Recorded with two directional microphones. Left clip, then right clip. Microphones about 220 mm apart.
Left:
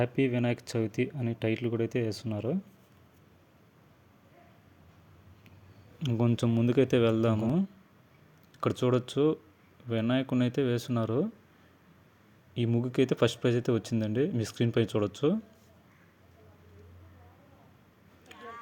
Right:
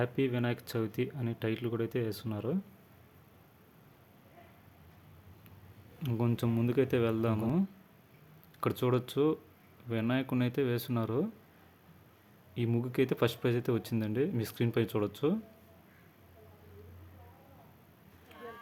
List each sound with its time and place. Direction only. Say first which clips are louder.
0.0 s speech: left 4 dB; 10° left (ahead or behind)
6.0 s speech: left 4 dB; 15° left (ahead or behind)
8.6 s speech: left 3 dB; 10° left (ahead or behind)
12.5 s speech: left 3 dB; 10° left (ahead or behind)